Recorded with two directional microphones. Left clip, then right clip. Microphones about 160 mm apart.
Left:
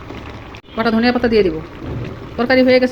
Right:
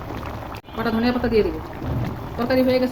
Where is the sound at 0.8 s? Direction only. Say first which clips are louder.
Left 7 dB; 30° left (ahead or behind).